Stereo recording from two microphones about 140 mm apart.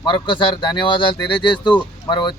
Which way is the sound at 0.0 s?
35° left (ahead or behind).